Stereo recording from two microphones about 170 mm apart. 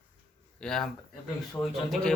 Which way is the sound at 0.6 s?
5° left (ahead or behind).